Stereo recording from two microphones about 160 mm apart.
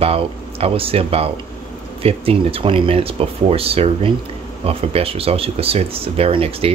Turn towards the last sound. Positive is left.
turn(degrees=-35)  # may be behind; listen again after turning